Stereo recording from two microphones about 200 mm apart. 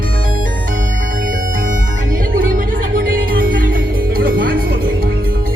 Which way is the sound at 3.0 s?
45° right (ahead or behind).